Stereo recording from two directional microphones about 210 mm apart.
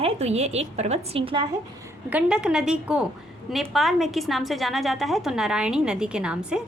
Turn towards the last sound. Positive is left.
turn(degrees=-5)  # may be behind; listen again after turning